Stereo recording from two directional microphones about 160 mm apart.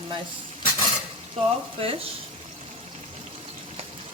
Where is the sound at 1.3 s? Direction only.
35° right (ahead or behind).